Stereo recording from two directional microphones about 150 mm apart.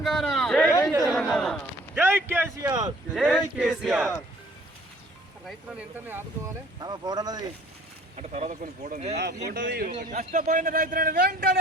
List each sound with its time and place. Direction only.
0.0 s speech: centre (ahead or behind)
1.0 s a sound: centre (ahead or behind)
2.0 s a man's voice: 15° right (ahead or behind)
2.6 s speech: 25° right (ahead or behind)
3.2 s speech: 5° right (ahead or behind)
6.7 s speech: 30° right (ahead or behind)
8.1 s speech: 50° right (ahead or behind)
9.5 s speech: 80° right
10.0 s a man's voice: 55° right (ahead or behind); by 11.5 s 75° right (ahead or behind)